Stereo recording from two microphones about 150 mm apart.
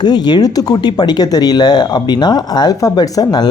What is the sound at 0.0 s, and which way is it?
Speech, 30° left (ahead or behind).